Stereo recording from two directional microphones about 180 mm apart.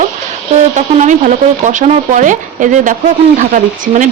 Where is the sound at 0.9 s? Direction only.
40° right (ahead or behind).